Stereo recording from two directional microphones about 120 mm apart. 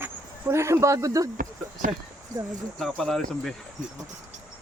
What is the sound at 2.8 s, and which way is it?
Speech, 5° left (ahead or behind).